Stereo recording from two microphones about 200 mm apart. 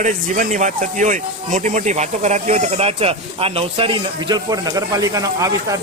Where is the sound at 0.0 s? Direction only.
40° right (ahead or behind).